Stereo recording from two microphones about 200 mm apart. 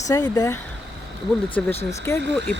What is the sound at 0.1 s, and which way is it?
Speech, 20° left (ahead or behind).